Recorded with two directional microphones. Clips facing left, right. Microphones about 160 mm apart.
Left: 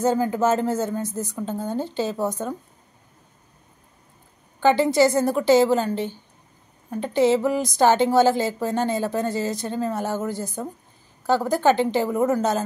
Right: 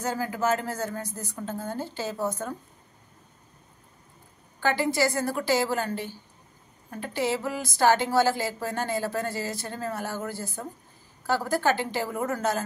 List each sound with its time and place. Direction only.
0.0 s a woman's voice: 25° left (ahead or behind)
4.6 s a woman's voice: 20° left (ahead or behind)